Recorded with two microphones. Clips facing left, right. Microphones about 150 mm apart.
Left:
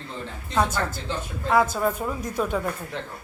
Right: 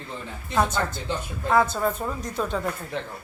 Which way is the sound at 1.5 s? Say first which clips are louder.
Left 1 dB; 10° left (ahead or behind).